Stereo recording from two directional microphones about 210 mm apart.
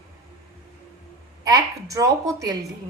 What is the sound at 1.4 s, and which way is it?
Speech, 15° right (ahead or behind).